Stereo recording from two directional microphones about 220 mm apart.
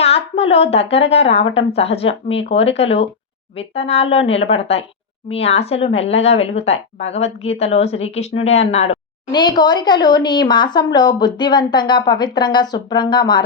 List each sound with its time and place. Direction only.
0.0 s speech: 25° left (ahead or behind)
9.3 s speech: 20° left (ahead or behind)